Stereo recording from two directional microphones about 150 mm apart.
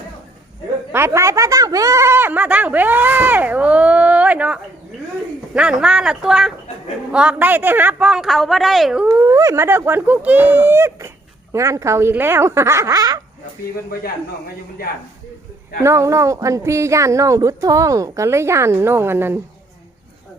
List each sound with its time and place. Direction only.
0.9 s speech: 15° right (ahead or behind)
9.0 s speech: 20° right (ahead or behind)
15.8 s speech: 20° right (ahead or behind)